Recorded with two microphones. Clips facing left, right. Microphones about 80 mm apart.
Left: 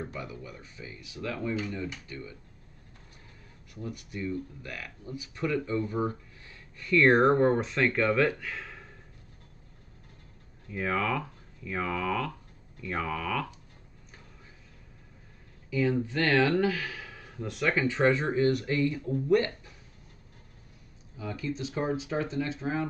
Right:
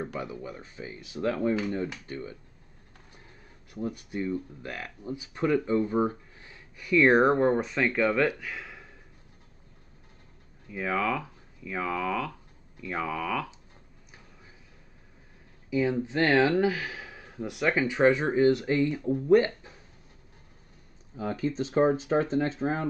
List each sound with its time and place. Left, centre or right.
0.2 s speech: right
3.7 s speech: right; by 8.8 s centre
10.7 s speech: centre
15.7 s speech: centre
21.2 s speech: right